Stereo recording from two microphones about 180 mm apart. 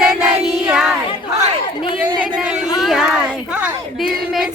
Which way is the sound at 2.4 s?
5° right (ahead or behind).